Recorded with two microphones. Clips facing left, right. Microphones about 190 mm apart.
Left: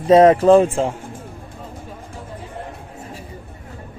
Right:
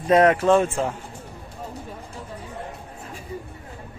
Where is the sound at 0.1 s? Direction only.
25° left (ahead or behind).